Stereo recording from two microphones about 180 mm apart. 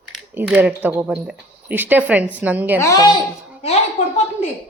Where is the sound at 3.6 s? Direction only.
35° left (ahead or behind).